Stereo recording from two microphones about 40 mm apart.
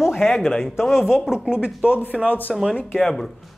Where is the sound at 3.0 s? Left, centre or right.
Centre.